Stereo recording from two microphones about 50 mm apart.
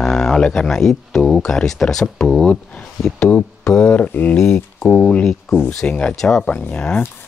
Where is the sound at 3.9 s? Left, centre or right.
Left.